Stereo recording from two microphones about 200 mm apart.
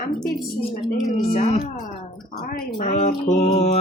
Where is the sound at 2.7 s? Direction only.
40° left (ahead or behind).